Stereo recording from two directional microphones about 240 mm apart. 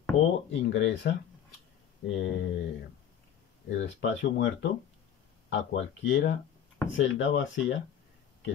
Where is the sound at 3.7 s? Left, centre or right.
Left.